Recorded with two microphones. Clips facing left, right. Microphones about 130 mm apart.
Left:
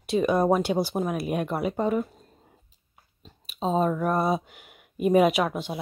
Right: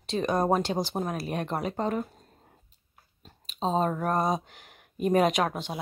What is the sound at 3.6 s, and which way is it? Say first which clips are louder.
Speech: left 2 dB; 35° right (ahead or behind).